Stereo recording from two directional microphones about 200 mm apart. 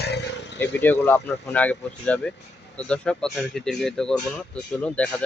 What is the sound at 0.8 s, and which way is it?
Speech, 10° left (ahead or behind).